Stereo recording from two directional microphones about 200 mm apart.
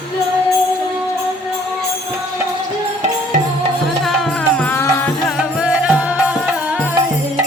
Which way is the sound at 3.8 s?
Centre (ahead or behind).